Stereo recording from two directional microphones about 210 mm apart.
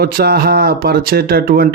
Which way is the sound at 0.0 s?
50° right (ahead or behind).